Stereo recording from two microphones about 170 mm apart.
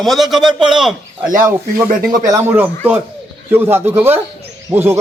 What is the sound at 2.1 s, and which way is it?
A man's voice, 20° right (ahead or behind).